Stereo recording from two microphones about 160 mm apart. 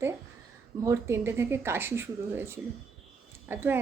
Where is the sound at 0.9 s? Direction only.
15° right (ahead or behind).